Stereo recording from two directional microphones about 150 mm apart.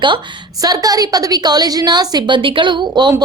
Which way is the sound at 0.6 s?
25° right (ahead or behind).